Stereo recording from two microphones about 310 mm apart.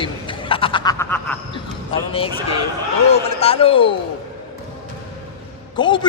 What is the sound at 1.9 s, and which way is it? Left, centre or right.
A man's voice, centre.